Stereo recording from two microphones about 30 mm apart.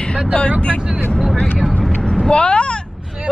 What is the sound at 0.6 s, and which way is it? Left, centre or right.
Speech, left.